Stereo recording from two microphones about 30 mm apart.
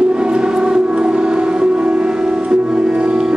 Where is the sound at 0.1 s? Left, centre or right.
Right.